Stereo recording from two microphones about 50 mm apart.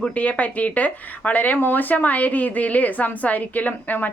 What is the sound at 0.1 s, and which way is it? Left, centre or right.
Speech, left.